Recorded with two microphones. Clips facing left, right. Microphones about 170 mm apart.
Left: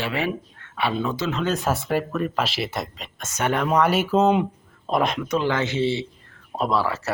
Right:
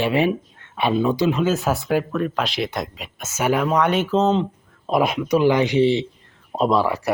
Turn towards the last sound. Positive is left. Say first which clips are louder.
# right 4 dB
turn(degrees=-15)  # may be behind; listen again after turning